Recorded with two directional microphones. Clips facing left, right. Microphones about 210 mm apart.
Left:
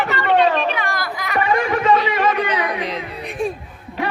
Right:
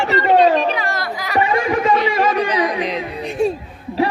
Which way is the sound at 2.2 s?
35° right (ahead or behind).